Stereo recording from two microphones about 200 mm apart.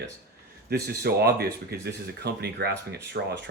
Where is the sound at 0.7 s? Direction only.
50° right (ahead or behind).